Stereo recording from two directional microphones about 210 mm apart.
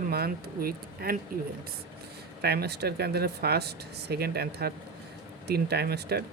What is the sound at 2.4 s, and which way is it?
Speech, 50° right (ahead or behind).